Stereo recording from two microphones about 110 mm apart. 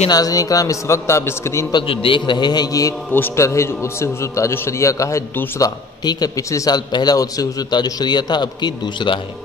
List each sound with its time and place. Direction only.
0.1 s a man's voice: 35° left (ahead or behind)
1.7 s a man's voice: 50° left (ahead or behind); by 2.9 s 35° left (ahead or behind)
3.1 s a man's voice: 25° left (ahead or behind); by 9.2 s 45° left (ahead or behind)